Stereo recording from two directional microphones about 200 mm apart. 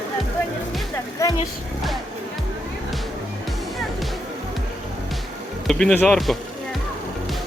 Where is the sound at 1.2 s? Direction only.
20° left (ahead or behind).